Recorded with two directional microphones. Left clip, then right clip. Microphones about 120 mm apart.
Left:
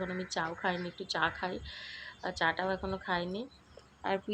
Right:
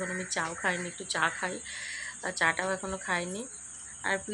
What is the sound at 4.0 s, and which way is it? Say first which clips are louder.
Speech: right 3 dB; 35° left (ahead or behind).